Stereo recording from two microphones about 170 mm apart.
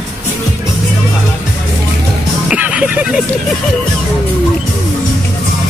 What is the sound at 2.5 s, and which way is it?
Music, 5° right (ahead or behind).